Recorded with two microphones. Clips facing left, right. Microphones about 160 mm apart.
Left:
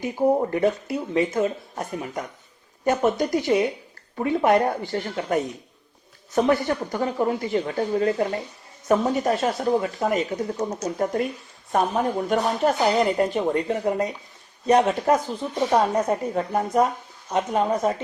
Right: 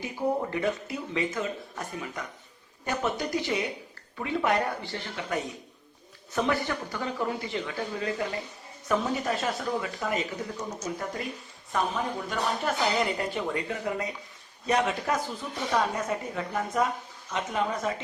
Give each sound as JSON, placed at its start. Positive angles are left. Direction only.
{"t": 0.2, "sound": "speech", "side_deg": 45}